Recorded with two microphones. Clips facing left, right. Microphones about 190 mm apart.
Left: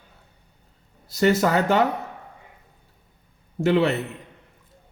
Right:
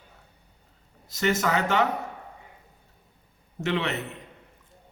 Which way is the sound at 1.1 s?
35° left (ahead or behind).